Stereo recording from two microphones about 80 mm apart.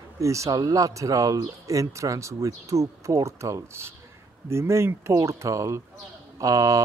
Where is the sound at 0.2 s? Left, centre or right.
Right.